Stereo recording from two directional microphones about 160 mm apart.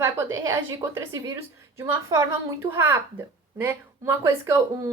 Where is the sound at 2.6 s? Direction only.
15° right (ahead or behind).